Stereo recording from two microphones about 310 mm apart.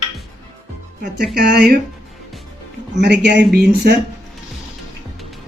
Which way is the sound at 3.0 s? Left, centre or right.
Right.